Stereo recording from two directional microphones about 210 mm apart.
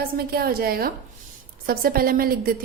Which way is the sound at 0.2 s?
45° right (ahead or behind).